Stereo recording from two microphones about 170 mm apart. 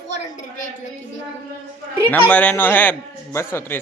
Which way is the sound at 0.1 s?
40° left (ahead or behind).